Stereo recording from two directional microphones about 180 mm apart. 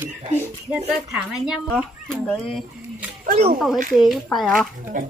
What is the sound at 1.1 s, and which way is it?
Speech, 5° right (ahead or behind).